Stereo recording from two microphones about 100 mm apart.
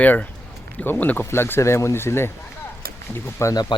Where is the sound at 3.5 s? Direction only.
40° left (ahead or behind).